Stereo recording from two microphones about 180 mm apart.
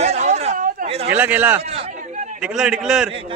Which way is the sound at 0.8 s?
35° right (ahead or behind).